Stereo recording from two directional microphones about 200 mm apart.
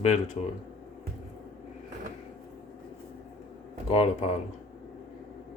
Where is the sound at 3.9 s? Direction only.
30° left (ahead or behind).